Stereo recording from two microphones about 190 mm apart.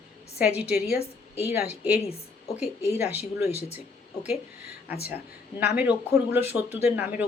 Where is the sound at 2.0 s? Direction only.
35° left (ahead or behind).